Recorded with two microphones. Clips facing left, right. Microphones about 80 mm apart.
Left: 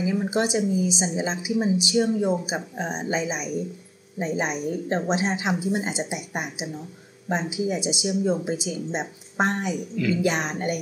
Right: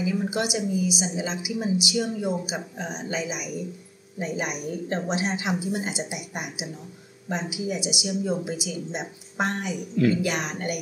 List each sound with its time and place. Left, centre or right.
0.0 s a woman's voice: left